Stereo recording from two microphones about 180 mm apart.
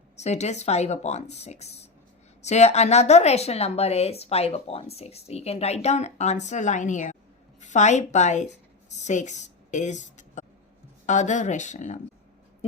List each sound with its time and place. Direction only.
0.2 s a woman's voice: 40° left (ahead or behind)